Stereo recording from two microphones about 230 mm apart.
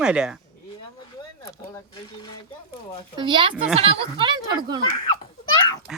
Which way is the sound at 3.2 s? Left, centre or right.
Right.